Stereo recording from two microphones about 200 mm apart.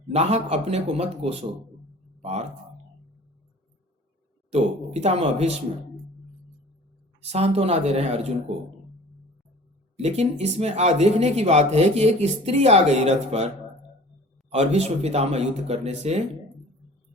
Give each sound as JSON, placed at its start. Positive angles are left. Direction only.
{"t": 0.1, "sound": "speech", "side_deg": -35}
{"t": 4.5, "sound": "speech", "side_deg": -35}
{"t": 7.3, "sound": "speech", "side_deg": -30}
{"t": 10.0, "sound": "speech", "side_deg": -35}
{"t": 14.5, "sound": "speech", "side_deg": -35}